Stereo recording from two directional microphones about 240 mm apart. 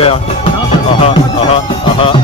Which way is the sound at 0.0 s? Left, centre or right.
Left.